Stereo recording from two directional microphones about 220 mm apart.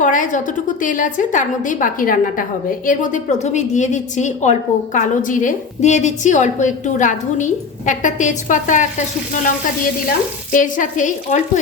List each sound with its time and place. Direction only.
0.0 s a woman's voice: 35° left (ahead or behind)